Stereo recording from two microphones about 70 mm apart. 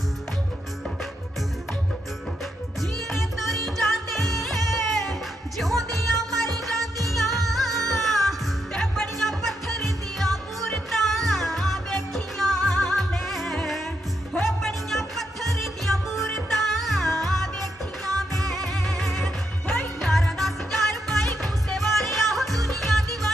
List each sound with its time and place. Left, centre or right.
3.1 s music: centre